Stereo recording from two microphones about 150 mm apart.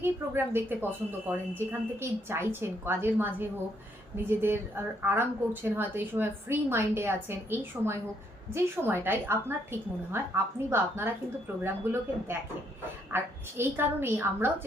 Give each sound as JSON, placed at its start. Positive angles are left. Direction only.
{"t": 0.0, "sound": "a woman's voice", "side_deg": -15}